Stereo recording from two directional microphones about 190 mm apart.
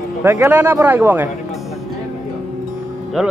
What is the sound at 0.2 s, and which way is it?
Speech, 10° right (ahead or behind).